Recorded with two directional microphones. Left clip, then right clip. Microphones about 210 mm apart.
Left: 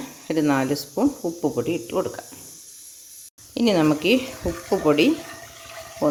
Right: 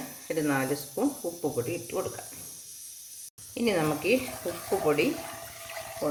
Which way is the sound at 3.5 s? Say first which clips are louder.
Left 8 dB; 40° left (ahead or behind).